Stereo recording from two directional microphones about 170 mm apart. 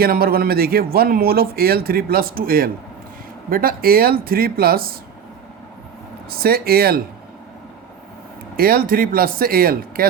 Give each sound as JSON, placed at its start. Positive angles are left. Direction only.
{"t": 0.0, "sound": "a man's voice", "side_deg": -60}
{"t": 6.4, "sound": "a man's voice", "side_deg": -65}
{"t": 8.5, "sound": "a man's voice", "side_deg": -60}